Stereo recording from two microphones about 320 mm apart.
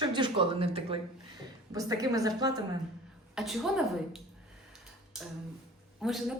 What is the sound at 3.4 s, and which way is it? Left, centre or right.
Speech, centre.